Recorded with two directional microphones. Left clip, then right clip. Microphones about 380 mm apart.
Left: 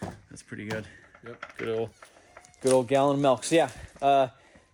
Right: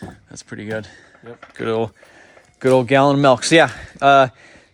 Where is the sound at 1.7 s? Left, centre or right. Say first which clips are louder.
Right 10 dB; right.